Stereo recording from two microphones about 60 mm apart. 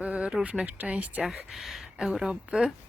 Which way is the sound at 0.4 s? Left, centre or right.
Right.